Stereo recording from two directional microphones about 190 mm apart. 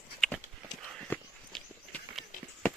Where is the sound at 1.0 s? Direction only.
5° left (ahead or behind).